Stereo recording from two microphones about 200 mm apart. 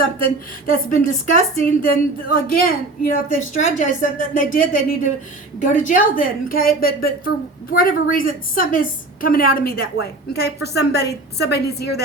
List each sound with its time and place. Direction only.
0.7 s a woman's voice: 45° left (ahead or behind)